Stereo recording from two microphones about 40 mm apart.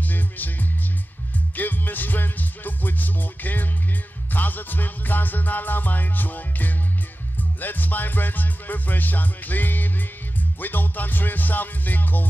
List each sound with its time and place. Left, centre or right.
0.0 s music: left